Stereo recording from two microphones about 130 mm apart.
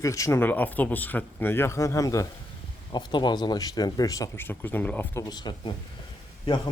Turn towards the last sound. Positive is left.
turn(degrees=35)  # may be behind; listen again after turning